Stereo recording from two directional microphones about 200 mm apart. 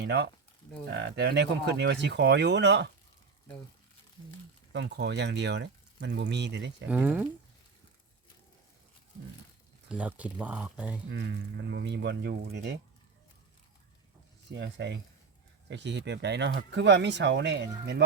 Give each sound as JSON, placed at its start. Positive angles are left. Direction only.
{"t": 0.0, "sound": "speech", "side_deg": -55}
{"t": 4.7, "sound": "speech", "side_deg": -60}
{"t": 6.8, "sound": "speech", "side_deg": -5}
{"t": 9.9, "sound": "speech", "side_deg": -5}
{"t": 11.1, "sound": "speech", "side_deg": -60}
{"t": 14.5, "sound": "speech", "side_deg": -60}